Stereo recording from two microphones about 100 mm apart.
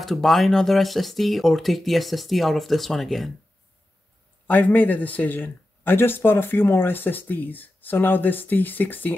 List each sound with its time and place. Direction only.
0.0 s speech: centre (ahead or behind)
4.5 s a man's voice: 15° left (ahead or behind)